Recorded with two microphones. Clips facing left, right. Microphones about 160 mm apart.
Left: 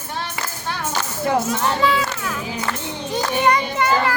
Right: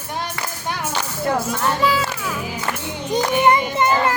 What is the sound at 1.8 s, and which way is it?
Speech, centre (ahead or behind).